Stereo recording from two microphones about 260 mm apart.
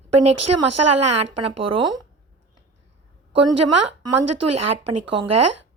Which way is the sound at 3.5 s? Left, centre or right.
Right.